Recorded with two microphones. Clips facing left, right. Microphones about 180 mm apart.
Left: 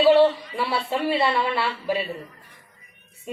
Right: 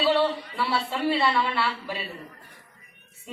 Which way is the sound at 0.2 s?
20° left (ahead or behind).